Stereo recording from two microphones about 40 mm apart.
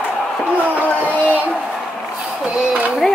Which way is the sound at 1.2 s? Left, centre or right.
Right.